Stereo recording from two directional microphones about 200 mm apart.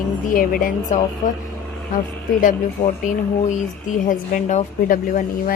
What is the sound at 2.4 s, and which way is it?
A woman's voice, 40° left (ahead or behind).